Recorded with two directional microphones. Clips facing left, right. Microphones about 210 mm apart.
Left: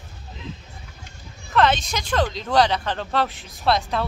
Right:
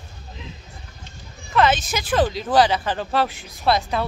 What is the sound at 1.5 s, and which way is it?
Speech, 5° right (ahead or behind).